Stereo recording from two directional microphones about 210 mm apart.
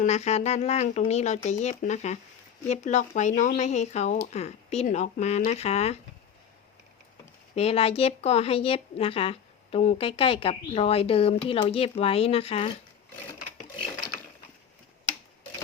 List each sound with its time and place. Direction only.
0.0 s speech: 30° left (ahead or behind)
7.5 s speech: 30° left (ahead or behind)